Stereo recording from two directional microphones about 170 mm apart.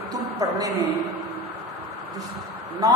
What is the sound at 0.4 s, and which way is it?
Speech, 20° right (ahead or behind).